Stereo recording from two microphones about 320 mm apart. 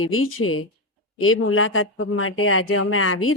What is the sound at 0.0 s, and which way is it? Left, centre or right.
Speech, left.